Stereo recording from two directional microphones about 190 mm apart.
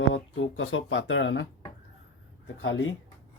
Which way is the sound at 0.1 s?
90° left.